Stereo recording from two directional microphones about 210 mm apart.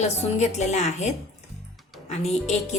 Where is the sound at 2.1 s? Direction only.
30° left (ahead or behind).